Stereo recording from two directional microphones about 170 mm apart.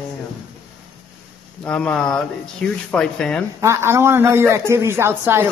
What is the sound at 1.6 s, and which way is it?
Speech, 5° left (ahead or behind).